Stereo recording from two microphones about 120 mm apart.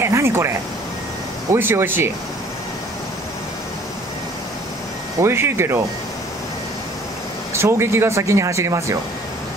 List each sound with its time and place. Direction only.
0.0 s a sound: 20° right (ahead or behind)
1.5 s speech: 20° right (ahead or behind)
5.2 s speech: 20° right (ahead or behind)
7.5 s speech: 20° right (ahead or behind)